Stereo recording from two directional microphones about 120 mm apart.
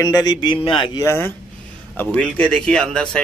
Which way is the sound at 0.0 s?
35° left (ahead or behind).